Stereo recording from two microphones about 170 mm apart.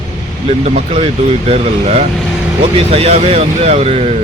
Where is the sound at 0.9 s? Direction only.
35° right (ahead or behind).